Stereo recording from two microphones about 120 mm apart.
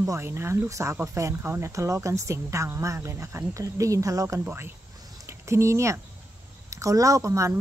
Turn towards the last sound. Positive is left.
turn(degrees=-25)  # may be behind; listen again after turning